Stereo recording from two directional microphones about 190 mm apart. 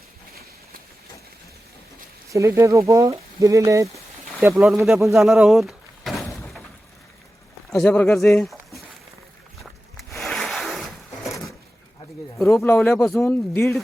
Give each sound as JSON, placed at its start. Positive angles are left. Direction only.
{"t": 2.3, "sound": "speech", "side_deg": -15}
{"t": 5.1, "sound": "door", "side_deg": 0}
{"t": 7.7, "sound": "speech", "side_deg": 5}
{"t": 8.3, "sound": "a sound", "side_deg": 5}
{"t": 10.2, "sound": "rub", "side_deg": 0}
{"t": 12.5, "sound": "speech", "side_deg": 10}